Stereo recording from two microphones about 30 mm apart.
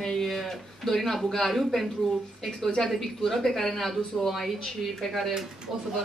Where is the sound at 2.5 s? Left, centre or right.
Centre.